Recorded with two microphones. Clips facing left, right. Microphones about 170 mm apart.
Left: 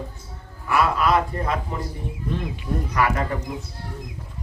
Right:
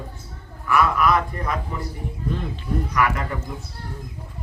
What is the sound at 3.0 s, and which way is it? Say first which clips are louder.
Speech: left 2 dB; 20° left (ahead or behind).